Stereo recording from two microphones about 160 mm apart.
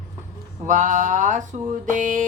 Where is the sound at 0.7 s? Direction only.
50° right (ahead or behind).